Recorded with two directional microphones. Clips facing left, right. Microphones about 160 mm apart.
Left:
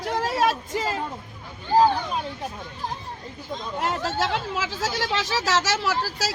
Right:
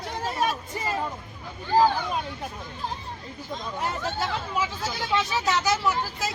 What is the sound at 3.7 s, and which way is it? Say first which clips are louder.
Speech: left 4 dB; 90° left.